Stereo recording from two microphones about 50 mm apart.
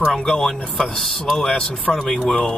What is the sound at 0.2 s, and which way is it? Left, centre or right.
Speech, centre.